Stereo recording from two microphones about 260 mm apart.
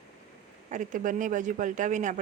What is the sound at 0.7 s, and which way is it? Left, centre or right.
Speech, right.